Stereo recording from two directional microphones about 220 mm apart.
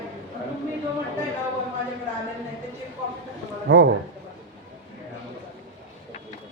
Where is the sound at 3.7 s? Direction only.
65° right (ahead or behind).